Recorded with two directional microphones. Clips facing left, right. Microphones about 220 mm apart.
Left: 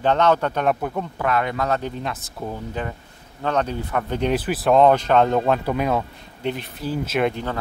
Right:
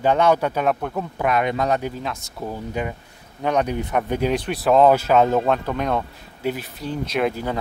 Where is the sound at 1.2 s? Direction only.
15° right (ahead or behind).